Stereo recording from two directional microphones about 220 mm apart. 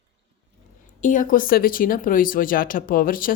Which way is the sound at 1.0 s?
35° left (ahead or behind).